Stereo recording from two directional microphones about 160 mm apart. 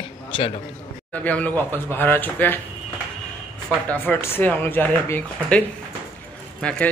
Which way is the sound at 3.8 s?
10° left (ahead or behind).